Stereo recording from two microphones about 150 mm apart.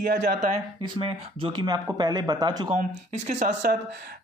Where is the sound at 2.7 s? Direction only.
55° right (ahead or behind).